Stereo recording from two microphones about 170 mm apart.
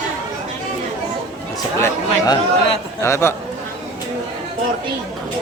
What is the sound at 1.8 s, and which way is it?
A man's voice, 20° left (ahead or behind).